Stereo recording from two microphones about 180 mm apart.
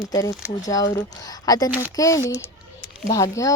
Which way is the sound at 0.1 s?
20° left (ahead or behind).